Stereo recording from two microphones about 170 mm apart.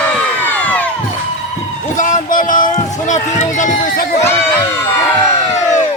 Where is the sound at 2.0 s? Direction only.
50° left (ahead or behind).